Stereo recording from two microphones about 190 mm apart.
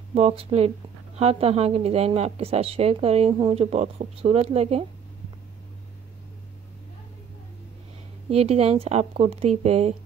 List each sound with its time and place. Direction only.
0.1 s speech: 30° right (ahead or behind)
8.3 s speech: 30° right (ahead or behind)